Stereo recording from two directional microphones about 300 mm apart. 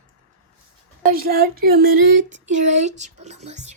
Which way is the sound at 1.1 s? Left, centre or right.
Right.